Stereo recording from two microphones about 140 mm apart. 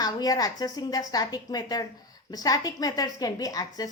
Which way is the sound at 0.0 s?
25° left (ahead or behind).